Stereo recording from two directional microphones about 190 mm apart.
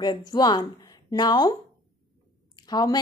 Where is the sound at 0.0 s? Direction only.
20° left (ahead or behind).